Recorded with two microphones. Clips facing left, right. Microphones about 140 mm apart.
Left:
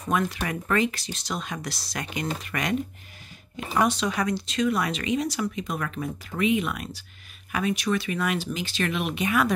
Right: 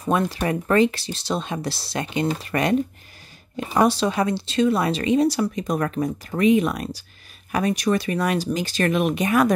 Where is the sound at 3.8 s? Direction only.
35° right (ahead or behind).